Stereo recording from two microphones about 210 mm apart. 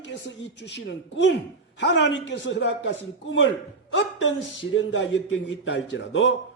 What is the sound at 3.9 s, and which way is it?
A man's voice, 60° left (ahead or behind).